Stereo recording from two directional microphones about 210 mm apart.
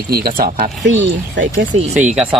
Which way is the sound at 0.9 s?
60° right (ahead or behind).